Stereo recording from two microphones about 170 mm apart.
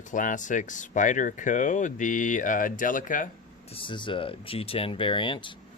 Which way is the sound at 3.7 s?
30° left (ahead or behind).